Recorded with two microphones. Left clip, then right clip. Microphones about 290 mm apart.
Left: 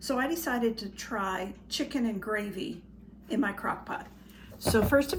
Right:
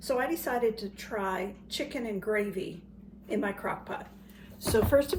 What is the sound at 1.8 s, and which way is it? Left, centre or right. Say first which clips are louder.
Speech: left 1 dB; centre.